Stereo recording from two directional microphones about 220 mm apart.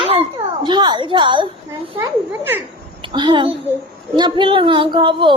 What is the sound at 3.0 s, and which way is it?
A child's voice, 20° right (ahead or behind).